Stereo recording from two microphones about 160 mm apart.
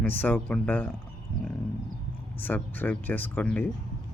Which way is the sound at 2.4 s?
10° left (ahead or behind).